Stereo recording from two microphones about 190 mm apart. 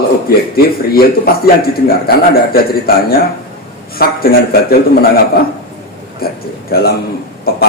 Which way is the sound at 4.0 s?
55° left (ahead or behind).